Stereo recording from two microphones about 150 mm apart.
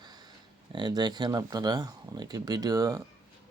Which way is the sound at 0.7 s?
30° right (ahead or behind).